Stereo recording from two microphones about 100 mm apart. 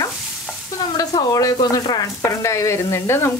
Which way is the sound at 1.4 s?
40° left (ahead or behind).